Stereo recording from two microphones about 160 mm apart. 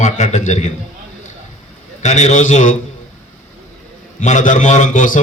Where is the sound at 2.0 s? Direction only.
45° left (ahead or behind).